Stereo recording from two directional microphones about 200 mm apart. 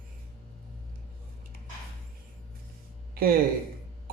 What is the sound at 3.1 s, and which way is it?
Speech, 45° right (ahead or behind).